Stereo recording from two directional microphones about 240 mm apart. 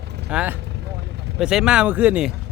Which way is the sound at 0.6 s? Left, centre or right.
Right.